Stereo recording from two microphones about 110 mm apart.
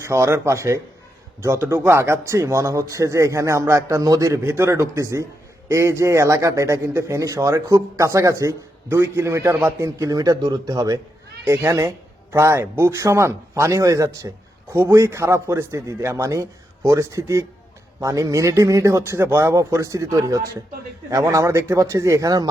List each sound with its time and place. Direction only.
0.0 s a man's voice: 25° right (ahead or behind)